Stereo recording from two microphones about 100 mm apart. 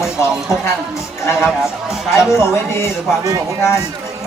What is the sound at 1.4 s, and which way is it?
Speech, 5° right (ahead or behind).